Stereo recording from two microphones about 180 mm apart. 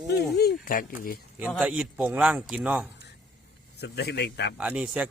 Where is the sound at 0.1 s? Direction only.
65° left (ahead or behind).